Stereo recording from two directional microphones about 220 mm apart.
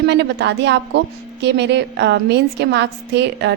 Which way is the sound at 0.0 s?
50° right (ahead or behind).